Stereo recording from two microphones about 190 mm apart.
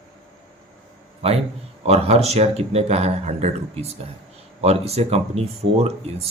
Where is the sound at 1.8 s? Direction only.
35° right (ahead or behind).